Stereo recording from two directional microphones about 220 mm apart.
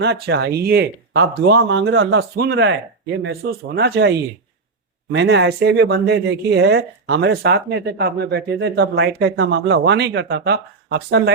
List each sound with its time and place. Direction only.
0.0 s speech: 50° right (ahead or behind)